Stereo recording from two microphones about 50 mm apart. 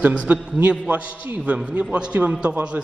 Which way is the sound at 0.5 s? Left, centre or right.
Right.